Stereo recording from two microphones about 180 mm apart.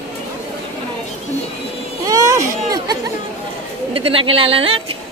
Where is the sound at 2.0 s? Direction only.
20° right (ahead or behind).